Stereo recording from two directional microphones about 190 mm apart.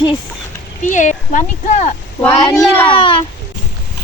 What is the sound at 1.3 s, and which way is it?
Speech, 40° left (ahead or behind).